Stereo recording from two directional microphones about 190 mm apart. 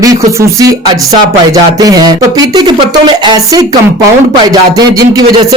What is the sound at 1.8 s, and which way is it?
Speech, 20° right (ahead or behind).